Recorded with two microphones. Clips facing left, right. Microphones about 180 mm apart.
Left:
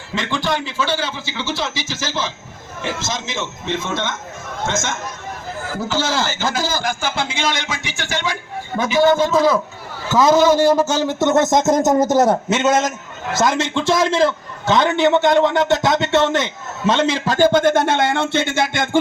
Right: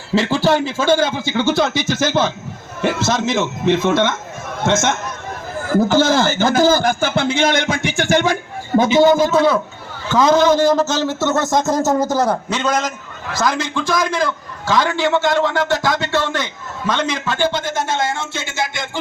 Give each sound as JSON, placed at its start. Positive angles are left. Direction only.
{"t": 0.1, "sound": "a man's voice", "side_deg": -35}
{"t": 5.9, "sound": "a man's voice", "side_deg": -55}
{"t": 8.8, "sound": "a man's voice", "side_deg": -20}
{"t": 9.1, "sound": "a man's voice", "side_deg": -5}